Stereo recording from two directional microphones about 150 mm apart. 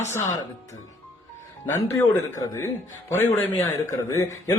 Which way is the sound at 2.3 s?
20° left (ahead or behind).